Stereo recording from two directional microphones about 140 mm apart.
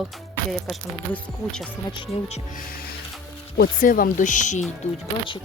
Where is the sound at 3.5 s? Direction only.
85° left; by 4.6 s 60° left (ahead or behind).